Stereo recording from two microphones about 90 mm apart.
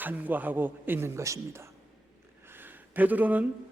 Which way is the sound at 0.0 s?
20° right (ahead or behind).